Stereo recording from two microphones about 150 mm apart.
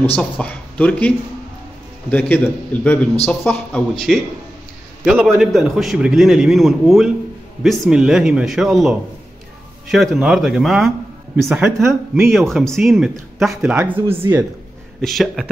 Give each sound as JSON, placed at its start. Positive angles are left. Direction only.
{"t": 0.0, "sound": "a man's voice", "side_deg": 10}
{"t": 12.3, "sound": "a man's voice", "side_deg": 0}
{"t": 15.0, "sound": "a man's voice", "side_deg": 0}